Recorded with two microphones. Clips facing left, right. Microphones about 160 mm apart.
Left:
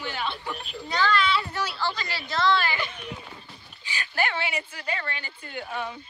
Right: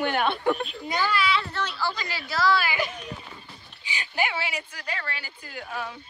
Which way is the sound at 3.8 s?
15° right (ahead or behind).